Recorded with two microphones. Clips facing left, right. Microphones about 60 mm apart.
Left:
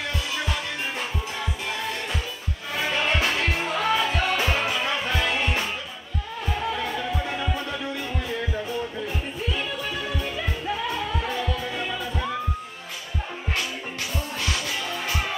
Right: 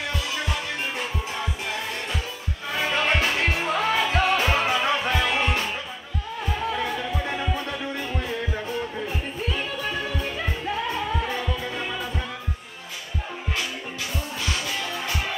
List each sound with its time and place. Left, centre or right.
2.8 s music: right
6.7 s music: centre
9.5 s music: right